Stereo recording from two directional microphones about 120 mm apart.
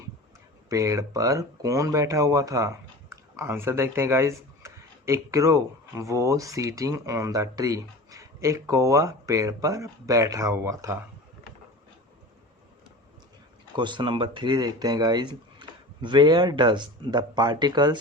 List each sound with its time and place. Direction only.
0.7 s speech: 25° right (ahead or behind)
13.7 s speech: 40° right (ahead or behind)